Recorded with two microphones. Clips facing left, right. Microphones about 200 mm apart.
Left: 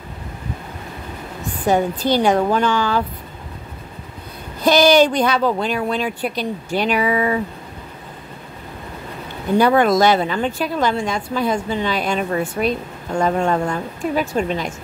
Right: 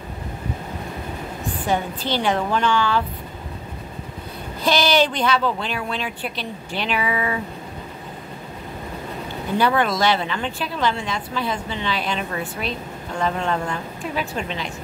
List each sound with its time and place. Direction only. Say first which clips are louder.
1.7 s a woman's voice: left 7 dB; 40° left (ahead or behind)
4.6 s a woman's voice: left 6 dB; 45° left (ahead or behind)
9.6 s a woman's voice: left 6 dB; 45° left (ahead or behind)